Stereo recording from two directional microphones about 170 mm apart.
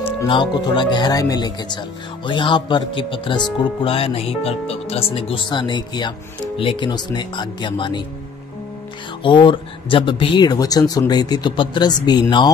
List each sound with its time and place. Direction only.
0.3 s speech: 30° left (ahead or behind)
9.2 s speech: 30° left (ahead or behind)